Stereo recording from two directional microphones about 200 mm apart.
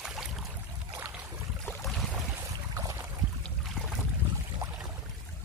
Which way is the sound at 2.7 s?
15° right (ahead or behind).